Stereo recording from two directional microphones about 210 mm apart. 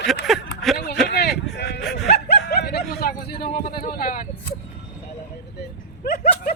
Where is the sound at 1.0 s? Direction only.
50° left (ahead or behind).